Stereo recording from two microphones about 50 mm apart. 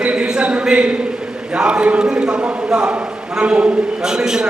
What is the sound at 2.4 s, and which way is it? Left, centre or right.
Speech, right.